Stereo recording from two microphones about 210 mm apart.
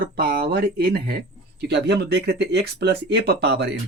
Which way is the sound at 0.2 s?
45° right (ahead or behind).